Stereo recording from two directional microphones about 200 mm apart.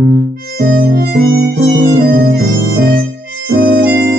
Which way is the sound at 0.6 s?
50° right (ahead or behind).